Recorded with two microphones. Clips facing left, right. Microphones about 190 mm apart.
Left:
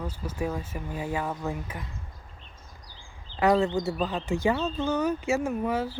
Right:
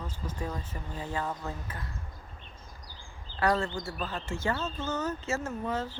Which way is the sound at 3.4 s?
20° left (ahead or behind).